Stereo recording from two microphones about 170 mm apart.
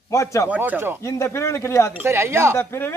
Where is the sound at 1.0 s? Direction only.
15° left (ahead or behind).